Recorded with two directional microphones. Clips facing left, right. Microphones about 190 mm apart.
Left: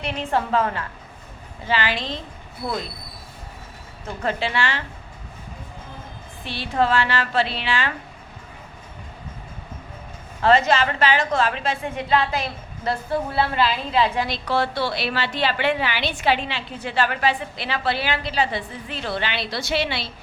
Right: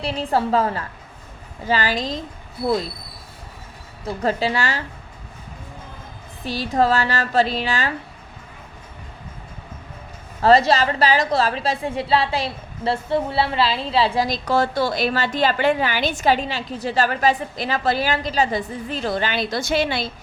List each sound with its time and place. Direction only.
0.0 s a woman's voice: 35° right (ahead or behind)
4.0 s a woman's voice: 35° right (ahead or behind)
6.4 s a woman's voice: 40° right (ahead or behind)
10.4 s a woman's voice: 35° right (ahead or behind)